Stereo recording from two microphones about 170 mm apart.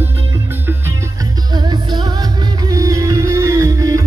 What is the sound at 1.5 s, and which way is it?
Music, 25° right (ahead or behind).